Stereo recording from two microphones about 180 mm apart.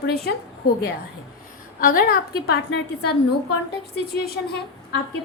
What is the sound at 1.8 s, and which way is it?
A woman's voice, 55° left (ahead or behind).